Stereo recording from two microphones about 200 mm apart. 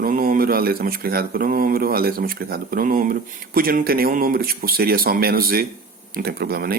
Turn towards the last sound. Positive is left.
turn(degrees=-50)  # may be behind; listen again after turning